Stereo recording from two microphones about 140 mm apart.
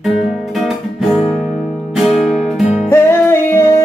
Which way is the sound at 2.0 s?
Centre (ahead or behind).